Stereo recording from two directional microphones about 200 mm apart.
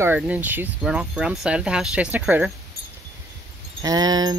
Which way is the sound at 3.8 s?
20° right (ahead or behind).